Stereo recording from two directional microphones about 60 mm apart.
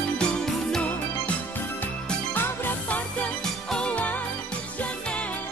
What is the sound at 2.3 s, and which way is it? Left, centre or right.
Music, left.